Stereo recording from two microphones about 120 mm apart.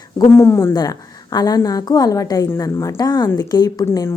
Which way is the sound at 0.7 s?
35° left (ahead or behind).